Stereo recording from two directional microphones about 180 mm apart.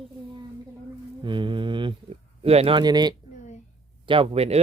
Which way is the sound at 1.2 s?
25° right (ahead or behind).